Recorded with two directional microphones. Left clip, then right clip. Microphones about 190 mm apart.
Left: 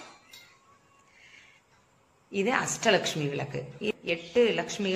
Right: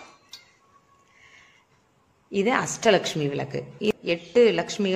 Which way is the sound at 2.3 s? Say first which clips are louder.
Right 4 dB; 40° right (ahead or behind).